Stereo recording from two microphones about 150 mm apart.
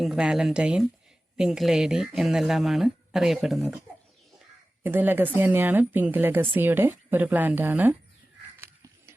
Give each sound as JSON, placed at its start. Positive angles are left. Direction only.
{"t": 0.0, "sound": "speech", "side_deg": 0}
{"t": 4.8, "sound": "a woman's voice", "side_deg": -15}
{"t": 8.5, "sound": "crow", "side_deg": -15}